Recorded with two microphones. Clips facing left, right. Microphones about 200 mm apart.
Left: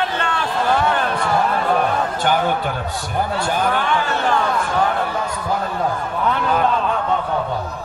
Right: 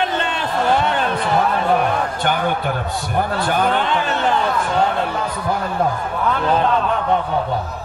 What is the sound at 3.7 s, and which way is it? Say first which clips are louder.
A man's voice: right 1 dB; 20° right (ahead or behind).